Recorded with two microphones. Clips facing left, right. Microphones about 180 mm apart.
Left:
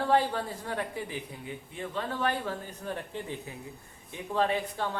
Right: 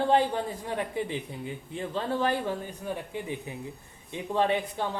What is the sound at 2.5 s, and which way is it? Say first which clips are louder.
Speech: right 3 dB; 10° right (ahead or behind).